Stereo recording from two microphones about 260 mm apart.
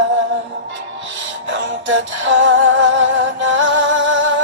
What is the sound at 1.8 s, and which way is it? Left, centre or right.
Music, right.